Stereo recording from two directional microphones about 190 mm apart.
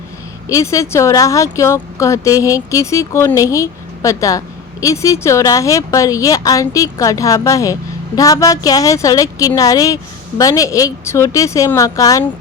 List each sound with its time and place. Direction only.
0.4 s speech: 15° left (ahead or behind)